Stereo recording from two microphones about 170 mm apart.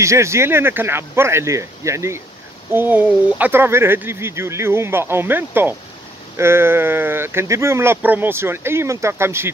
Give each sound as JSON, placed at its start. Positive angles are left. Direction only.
{"t": 0.0, "sound": "speech", "side_deg": -15}